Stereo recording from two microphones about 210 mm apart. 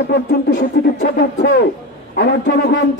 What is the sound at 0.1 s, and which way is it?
Speech, 55° left (ahead or behind).